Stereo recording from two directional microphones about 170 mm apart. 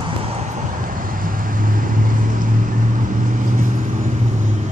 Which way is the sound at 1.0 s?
55° right (ahead or behind).